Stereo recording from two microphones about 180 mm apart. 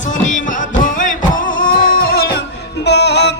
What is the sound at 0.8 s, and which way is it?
Music, 45° left (ahead or behind).